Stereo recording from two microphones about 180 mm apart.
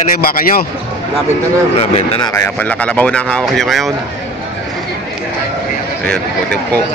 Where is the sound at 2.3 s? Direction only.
10° left (ahead or behind).